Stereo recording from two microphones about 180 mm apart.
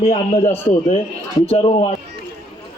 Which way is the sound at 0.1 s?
40° left (ahead or behind).